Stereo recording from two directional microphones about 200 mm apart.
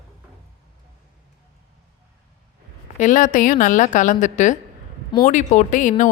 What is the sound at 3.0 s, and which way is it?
A woman's voice, 40° left (ahead or behind).